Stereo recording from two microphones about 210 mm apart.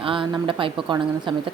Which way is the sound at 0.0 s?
25° right (ahead or behind).